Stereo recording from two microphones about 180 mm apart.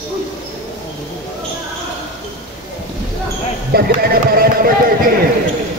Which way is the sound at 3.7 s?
60° right (ahead or behind).